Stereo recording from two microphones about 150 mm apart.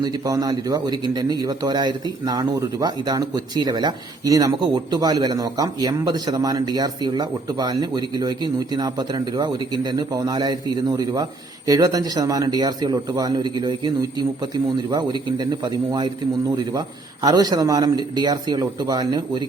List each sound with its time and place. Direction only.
0.0 s a man's voice: 25° right (ahead or behind)